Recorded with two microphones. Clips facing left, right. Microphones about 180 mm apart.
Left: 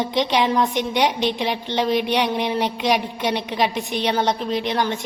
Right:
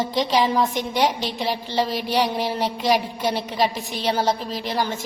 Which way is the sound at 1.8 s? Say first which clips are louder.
Left 7 dB; 60° left (ahead or behind).